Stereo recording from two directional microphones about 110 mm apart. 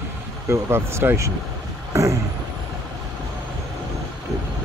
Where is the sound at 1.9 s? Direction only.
30° right (ahead or behind).